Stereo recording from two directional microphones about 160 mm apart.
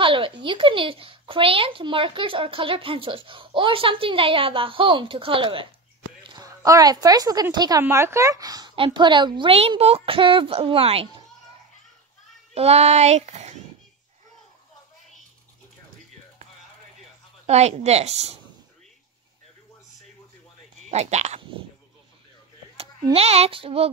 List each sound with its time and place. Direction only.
0.0 s speech: 35° right (ahead or behind)
12.5 s speech: 40° right (ahead or behind)
17.5 s speech: 45° right (ahead or behind)
20.9 s speech: 45° right (ahead or behind)
23.1 s speech: 40° right (ahead or behind)